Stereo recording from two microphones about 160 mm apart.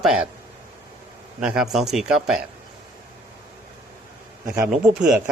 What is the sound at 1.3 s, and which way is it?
Speech, 5° right (ahead or behind).